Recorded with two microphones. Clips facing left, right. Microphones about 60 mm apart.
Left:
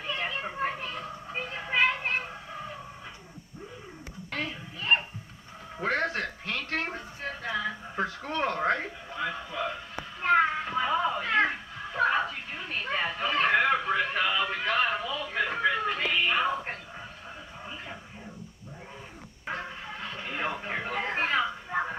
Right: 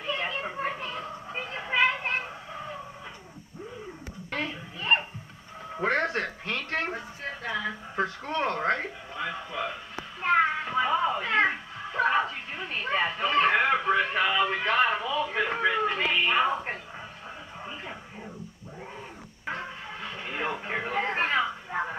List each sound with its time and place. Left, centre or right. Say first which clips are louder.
0.0 s children playing: right 2 dB; centre
4.3 s a sound: right 2 dB; centre
5.8 s speech: right 2 dB; centre
7.4 s speech: even; centre
10.2 s children playing: even; centre
14.7 s a sound: right 1 dB; centre
19.4 s music: right 1 dB; centre